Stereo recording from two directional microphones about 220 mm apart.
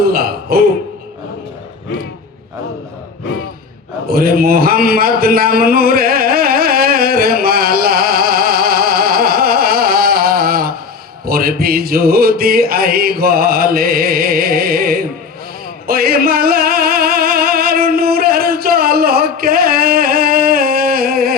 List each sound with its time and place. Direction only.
0.0 s speech: 45° right (ahead or behind)
4.1 s a sound: 45° right (ahead or behind)
11.3 s music: 45° right (ahead or behind)